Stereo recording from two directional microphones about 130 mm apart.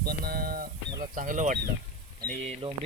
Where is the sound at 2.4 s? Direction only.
50° right (ahead or behind).